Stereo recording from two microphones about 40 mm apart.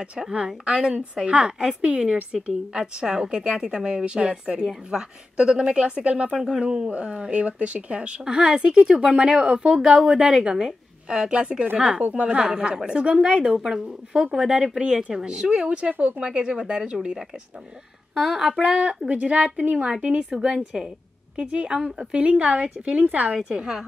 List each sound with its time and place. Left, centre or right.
0.7 s a woman's voice: right
2.7 s a woman's voice: centre
6.3 s speech: centre
6.6 s speech: right
8.3 s a woman's voice: centre
18.1 s speech: centre
18.6 s a woman's voice: right
20.3 s speech: centre
21.4 s a woman's voice: right
21.7 s speech: centre
22.1 s speech: right
23.5 s a woman's voice: centre